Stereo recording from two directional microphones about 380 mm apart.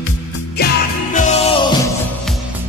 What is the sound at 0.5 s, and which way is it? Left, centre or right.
Music, left.